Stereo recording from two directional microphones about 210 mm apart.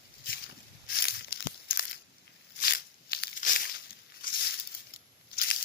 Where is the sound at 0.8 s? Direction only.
50° left (ahead or behind).